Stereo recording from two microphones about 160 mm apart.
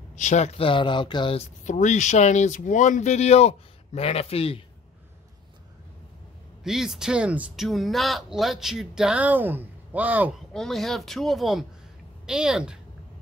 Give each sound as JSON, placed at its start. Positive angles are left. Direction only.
{"t": 0.1, "sound": "speech", "side_deg": 50}
{"t": 6.6, "sound": "speech", "side_deg": -5}
{"t": 10.5, "sound": "speech", "side_deg": 0}